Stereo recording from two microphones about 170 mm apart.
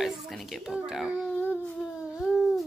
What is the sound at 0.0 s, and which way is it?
Speech, centre (ahead or behind).